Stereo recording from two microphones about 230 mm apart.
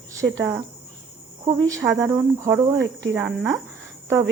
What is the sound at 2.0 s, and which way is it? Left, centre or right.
Speech, centre.